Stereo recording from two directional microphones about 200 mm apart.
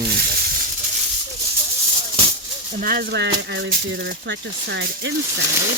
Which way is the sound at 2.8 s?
50° right (ahead or behind).